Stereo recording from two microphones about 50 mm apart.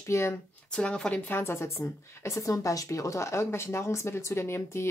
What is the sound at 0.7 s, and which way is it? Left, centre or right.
Speech, centre.